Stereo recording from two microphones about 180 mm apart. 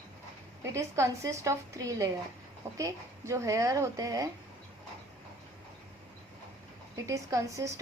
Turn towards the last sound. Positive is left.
turn(degrees=-15)  # may be behind; listen again after turning